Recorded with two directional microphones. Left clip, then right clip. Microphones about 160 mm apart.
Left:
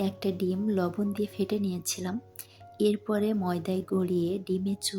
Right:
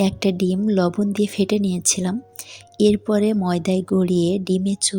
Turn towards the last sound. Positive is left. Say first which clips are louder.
# right 9 dB
turn(degrees=-40)  # may be behind; listen again after turning